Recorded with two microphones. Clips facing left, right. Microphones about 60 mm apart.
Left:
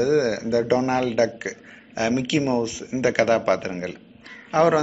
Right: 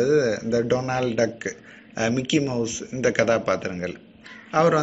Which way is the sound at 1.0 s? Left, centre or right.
Centre.